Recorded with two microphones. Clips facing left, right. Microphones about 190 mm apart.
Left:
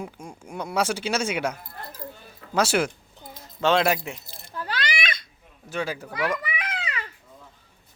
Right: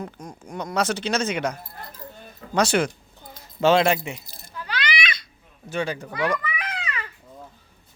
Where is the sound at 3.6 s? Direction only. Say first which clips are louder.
Right 3 dB; 5° right (ahead or behind).